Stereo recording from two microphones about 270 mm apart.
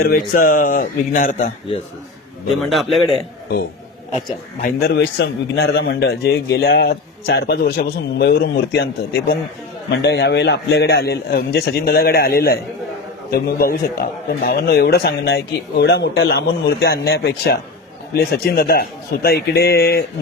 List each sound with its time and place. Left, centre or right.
0.0 s a man's voice: left
2.5 s a man's voice: centre
4.6 s a man's voice: left